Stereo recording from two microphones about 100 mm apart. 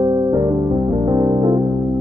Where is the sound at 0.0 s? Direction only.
40° right (ahead or behind).